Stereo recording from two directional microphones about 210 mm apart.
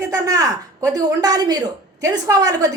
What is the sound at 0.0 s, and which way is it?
A woman's voice, 15° right (ahead or behind).